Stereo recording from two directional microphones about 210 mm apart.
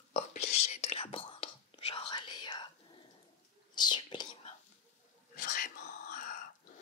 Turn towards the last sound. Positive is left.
turn(degrees=40)  # may be behind; listen again after turning